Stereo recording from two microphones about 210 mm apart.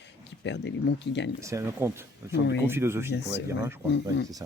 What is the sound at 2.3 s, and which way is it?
Speech, 55° left (ahead or behind).